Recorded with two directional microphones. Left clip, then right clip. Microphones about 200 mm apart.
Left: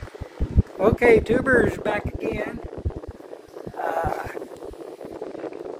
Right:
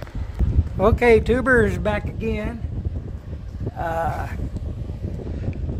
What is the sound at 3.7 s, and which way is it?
Speech, 15° right (ahead or behind).